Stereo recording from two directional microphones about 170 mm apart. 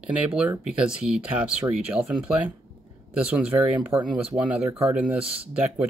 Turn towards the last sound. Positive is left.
turn(degrees=-5)  # may be behind; listen again after turning